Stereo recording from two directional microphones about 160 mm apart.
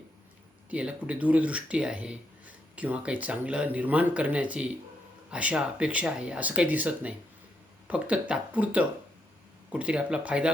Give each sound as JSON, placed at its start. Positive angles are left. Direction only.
{"t": 0.7, "sound": "speech", "side_deg": -5}